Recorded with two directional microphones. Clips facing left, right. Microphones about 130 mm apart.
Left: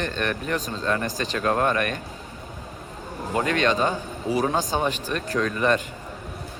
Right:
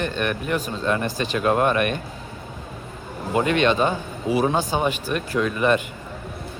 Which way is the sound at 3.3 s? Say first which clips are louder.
Right 3 dB; 15° right (ahead or behind).